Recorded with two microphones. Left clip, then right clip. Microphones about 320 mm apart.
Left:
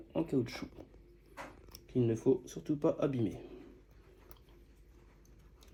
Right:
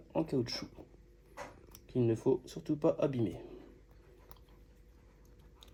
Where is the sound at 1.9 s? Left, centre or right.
Right.